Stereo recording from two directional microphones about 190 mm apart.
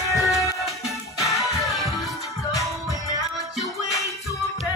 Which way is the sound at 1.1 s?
15° left (ahead or behind).